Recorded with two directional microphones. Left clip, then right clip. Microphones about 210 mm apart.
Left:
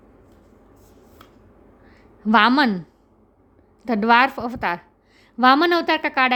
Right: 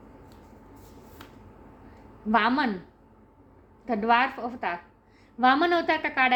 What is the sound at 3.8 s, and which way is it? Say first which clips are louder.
A woman's voice: left 7 dB; 55° left (ahead or behind).